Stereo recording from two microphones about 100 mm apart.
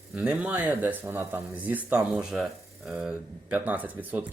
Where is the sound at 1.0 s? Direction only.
25° right (ahead or behind).